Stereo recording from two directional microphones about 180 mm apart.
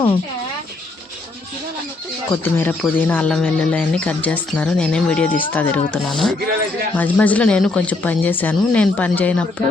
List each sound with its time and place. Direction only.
2.3 s speech: 10° left (ahead or behind)